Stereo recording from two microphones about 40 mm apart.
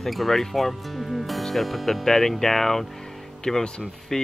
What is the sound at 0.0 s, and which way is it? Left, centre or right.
Speech, centre.